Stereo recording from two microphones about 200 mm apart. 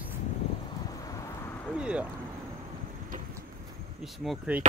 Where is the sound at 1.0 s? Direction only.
15° left (ahead or behind).